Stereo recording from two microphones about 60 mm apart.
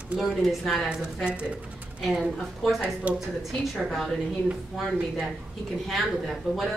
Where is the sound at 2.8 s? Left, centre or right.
Right.